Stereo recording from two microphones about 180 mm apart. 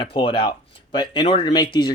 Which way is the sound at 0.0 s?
25° left (ahead or behind).